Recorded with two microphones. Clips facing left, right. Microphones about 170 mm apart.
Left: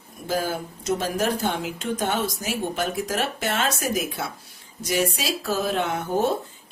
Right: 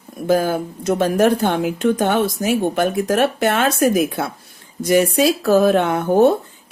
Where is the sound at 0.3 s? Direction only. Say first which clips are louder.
Right 9 dB; 55° right (ahead or behind).